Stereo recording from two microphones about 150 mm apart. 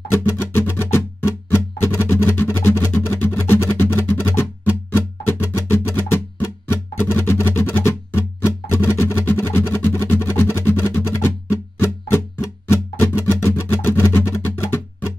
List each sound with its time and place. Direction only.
0.1 s music: 15° left (ahead or behind)